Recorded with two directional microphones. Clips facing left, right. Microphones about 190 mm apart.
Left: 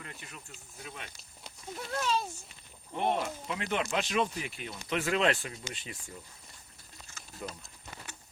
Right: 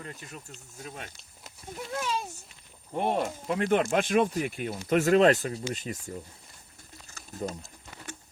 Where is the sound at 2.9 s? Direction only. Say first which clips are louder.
Right 3 dB; 45° right (ahead or behind).